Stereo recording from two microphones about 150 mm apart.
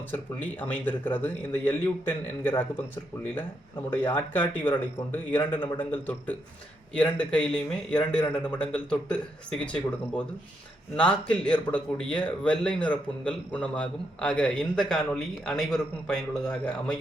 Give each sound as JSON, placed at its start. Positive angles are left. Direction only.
{"t": 0.1, "sound": "a man's voice", "side_deg": 10}
{"t": 3.8, "sound": "a man's voice", "side_deg": 15}